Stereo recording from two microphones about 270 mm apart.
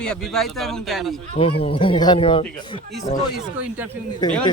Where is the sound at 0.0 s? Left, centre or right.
Centre.